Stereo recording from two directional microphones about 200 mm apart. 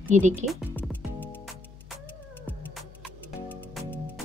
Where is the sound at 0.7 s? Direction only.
10° left (ahead or behind).